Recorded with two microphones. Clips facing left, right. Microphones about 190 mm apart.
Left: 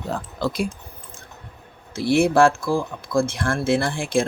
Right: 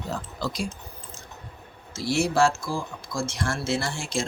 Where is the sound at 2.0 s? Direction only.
55° left (ahead or behind).